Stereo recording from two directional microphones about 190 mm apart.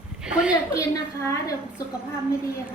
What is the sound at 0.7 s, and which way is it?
Speech, 15° left (ahead or behind).